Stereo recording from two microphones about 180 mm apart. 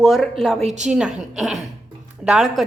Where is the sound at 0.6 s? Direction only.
40° right (ahead or behind).